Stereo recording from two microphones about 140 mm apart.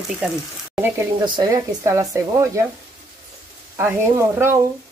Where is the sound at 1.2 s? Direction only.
30° right (ahead or behind).